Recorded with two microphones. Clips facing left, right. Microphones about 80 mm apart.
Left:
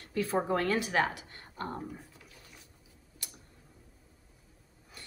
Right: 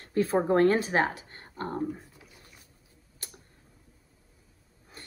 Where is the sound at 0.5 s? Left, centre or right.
Right.